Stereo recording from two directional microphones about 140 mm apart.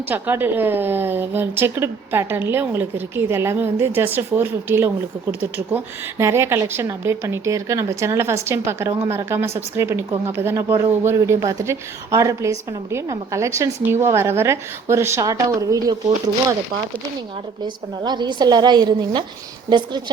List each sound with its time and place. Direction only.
0.1 s a woman's voice: 15° right (ahead or behind)
18.0 s a woman's voice: 30° right (ahead or behind)